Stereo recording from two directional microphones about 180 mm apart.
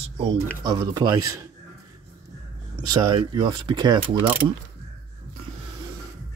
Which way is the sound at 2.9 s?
25° right (ahead or behind).